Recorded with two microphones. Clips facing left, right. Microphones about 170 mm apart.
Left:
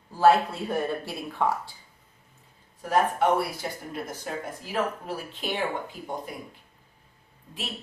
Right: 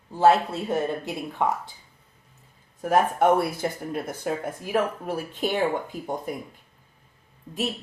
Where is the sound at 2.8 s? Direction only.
50° right (ahead or behind).